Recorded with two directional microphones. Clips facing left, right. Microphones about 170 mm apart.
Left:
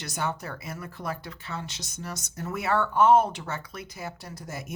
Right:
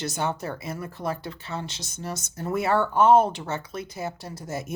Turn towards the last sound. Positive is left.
turn(degrees=-25)  # may be behind; listen again after turning